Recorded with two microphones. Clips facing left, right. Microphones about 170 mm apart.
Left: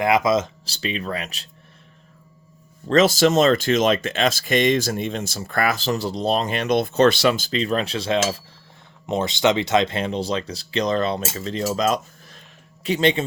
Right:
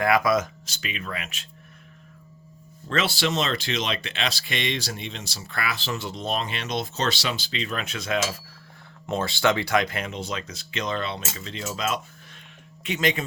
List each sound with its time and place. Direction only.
0.0 s speech: 20° left (ahead or behind); by 1.5 s 35° left (ahead or behind)
2.8 s speech: 40° left (ahead or behind)
9.0 s speech: 20° left (ahead or behind)